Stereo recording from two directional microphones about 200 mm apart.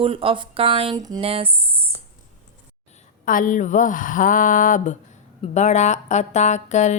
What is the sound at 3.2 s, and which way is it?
Speech, 40° left (ahead or behind).